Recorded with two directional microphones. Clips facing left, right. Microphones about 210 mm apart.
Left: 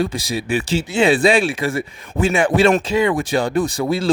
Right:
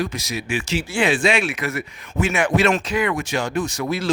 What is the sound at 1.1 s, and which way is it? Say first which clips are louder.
A man's voice: left 5 dB; 35° left (ahead or behind).